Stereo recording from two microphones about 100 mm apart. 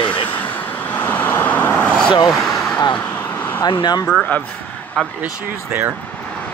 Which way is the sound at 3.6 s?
45° left (ahead or behind).